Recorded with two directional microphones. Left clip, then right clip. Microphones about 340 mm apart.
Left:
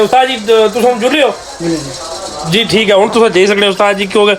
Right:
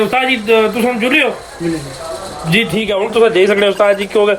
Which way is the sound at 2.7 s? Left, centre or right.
Left.